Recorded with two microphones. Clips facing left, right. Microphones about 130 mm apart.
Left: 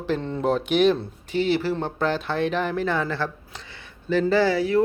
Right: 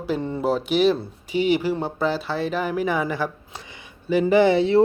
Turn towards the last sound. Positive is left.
turn(degrees=-25)  # may be behind; listen again after turning